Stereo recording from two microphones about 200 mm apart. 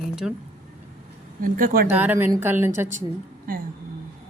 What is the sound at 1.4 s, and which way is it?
Speech, 45° right (ahead or behind).